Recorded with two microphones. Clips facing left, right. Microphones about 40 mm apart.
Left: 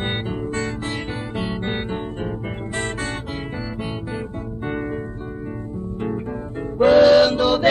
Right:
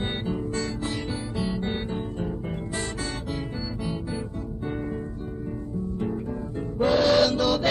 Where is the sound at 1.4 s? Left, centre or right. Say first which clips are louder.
Left 3 dB; left.